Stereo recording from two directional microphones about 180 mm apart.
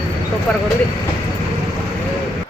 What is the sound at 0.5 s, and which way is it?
Speech, 5° left (ahead or behind).